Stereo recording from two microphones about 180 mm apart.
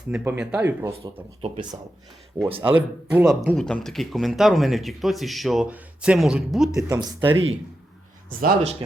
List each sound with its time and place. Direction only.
0.1 s speech: 5° right (ahead or behind)
2.6 s speech: 10° right (ahead or behind)
3.5 s speech: 5° left (ahead or behind)
6.8 s speech: 20° right (ahead or behind)
8.3 s a man's voice: 50° right (ahead or behind)